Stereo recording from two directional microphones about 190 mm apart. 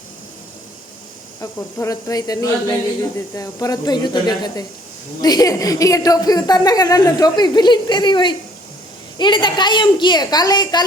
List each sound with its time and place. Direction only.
1.4 s a woman's voice: 15° left (ahead or behind)